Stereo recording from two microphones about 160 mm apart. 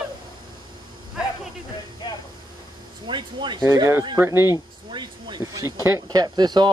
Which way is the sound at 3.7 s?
20° right (ahead or behind).